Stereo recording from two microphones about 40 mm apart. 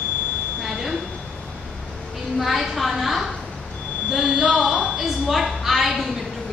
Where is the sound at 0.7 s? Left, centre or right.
Centre.